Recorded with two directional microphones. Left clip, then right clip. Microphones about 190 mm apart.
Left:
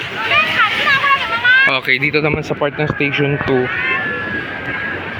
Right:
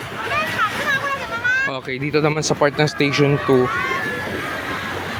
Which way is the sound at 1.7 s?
10° right (ahead or behind).